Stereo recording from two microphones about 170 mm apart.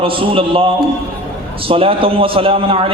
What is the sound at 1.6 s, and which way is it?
A man's voice, 35° right (ahead or behind).